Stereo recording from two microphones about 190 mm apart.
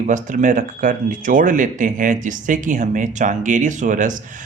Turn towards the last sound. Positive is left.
turn(degrees=-40)  # may be behind; listen again after turning